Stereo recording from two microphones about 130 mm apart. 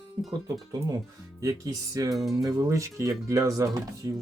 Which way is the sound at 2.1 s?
Centre (ahead or behind).